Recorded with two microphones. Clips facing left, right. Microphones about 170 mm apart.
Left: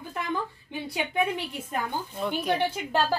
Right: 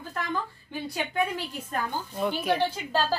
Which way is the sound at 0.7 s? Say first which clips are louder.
Even; 20° left (ahead or behind).